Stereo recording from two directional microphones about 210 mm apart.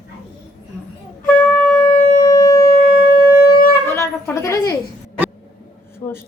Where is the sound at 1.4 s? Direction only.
5° left (ahead or behind).